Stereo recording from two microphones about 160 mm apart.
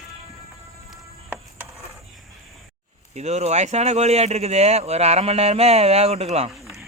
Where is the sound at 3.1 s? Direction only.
45° right (ahead or behind).